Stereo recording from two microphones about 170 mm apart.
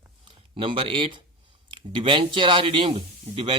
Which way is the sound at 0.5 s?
30° right (ahead or behind).